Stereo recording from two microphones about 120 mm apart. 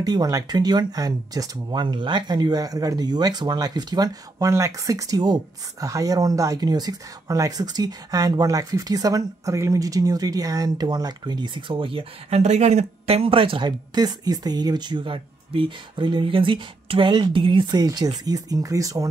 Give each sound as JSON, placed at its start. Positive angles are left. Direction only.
{"t": 0.0, "sound": "speech", "side_deg": -30}
{"t": 12.4, "sound": "speech", "side_deg": -70}